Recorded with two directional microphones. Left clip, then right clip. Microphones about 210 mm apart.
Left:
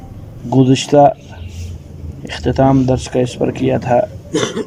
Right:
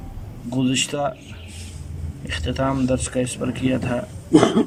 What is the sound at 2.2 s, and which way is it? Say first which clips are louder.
A man's voice: left 10 dB; 25° left (ahead or behind).